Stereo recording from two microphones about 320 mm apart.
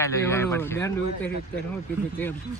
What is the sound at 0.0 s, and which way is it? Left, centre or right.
A man's voice, centre.